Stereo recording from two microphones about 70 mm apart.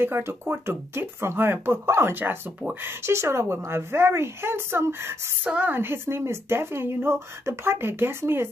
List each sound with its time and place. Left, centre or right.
0.0 s a woman's voice: right
5.4 s a woman's voice: right